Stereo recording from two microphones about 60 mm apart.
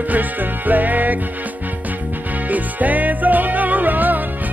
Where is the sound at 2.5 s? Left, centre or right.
Right.